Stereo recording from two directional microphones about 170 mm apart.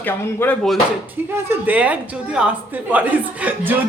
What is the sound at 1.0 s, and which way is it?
Speech, 10° right (ahead or behind).